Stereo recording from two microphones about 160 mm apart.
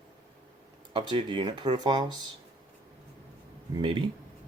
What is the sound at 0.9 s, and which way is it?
Speech, 30° right (ahead or behind).